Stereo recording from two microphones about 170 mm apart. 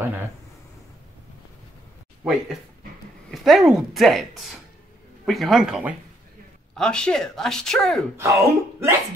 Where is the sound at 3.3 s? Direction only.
Centre (ahead or behind).